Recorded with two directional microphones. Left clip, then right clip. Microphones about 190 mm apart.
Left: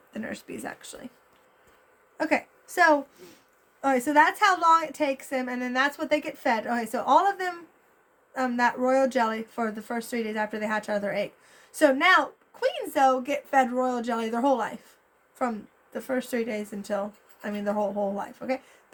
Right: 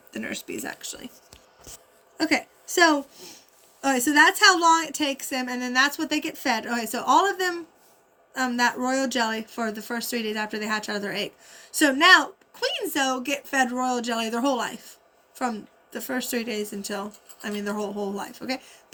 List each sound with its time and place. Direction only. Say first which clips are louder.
0.1 s a woman's voice: right 4 dB; 25° left (ahead or behind)
2.1 s a woman's voice: right 2 dB; 20° left (ahead or behind)